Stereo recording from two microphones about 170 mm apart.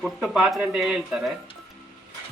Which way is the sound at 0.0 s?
Centre (ahead or behind).